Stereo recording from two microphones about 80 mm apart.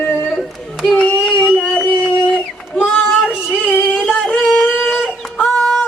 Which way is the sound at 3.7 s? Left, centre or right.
Left.